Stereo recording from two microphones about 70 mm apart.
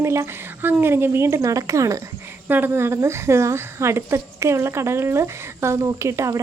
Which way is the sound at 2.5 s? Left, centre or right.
Right.